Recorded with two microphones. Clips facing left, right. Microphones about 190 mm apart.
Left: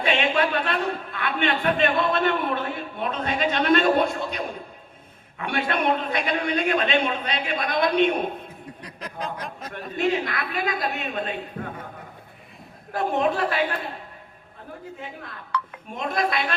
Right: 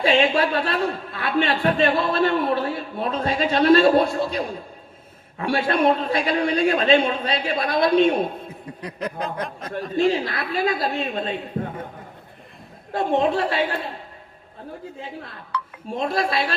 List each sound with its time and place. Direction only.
0.0 s speech: 35° right (ahead or behind)
9.2 s speech: centre (ahead or behind)
10.0 s speech: 30° right (ahead or behind)
12.9 s a man's voice: 25° right (ahead or behind)
15.5 s a sound: 55° left (ahead or behind)
15.9 s speech: 30° right (ahead or behind)